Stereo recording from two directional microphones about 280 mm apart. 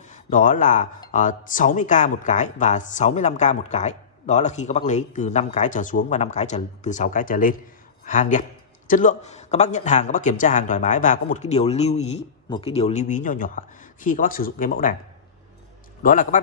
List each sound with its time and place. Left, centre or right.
0.1 s speech: left
16.0 s speech: left